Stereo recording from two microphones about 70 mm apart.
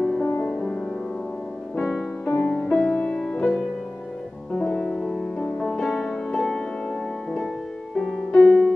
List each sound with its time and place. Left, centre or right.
0.0 s music: centre
1.8 s music: centre
4.6 s music: centre
8.3 s music: centre